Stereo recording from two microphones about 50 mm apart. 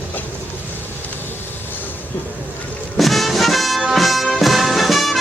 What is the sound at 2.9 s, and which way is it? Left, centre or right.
Music, centre.